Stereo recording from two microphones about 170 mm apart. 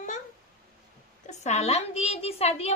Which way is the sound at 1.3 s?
40° left (ahead or behind).